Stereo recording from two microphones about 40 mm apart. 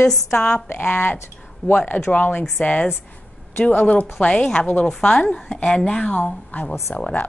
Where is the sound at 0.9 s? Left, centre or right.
Left.